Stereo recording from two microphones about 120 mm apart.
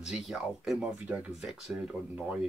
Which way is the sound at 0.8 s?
10° right (ahead or behind).